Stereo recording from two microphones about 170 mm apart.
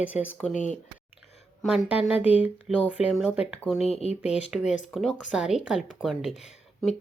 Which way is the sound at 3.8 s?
35° left (ahead or behind).